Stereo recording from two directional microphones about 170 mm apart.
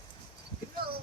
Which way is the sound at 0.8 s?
65° right (ahead or behind).